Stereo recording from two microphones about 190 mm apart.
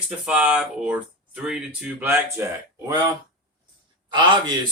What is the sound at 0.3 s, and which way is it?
Speech, 5° right (ahead or behind).